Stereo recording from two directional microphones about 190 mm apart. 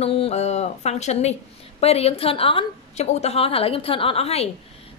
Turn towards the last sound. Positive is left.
turn(degrees=30)  # may be behind; listen again after turning